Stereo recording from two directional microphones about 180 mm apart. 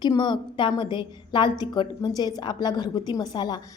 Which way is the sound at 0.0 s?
25° left (ahead or behind).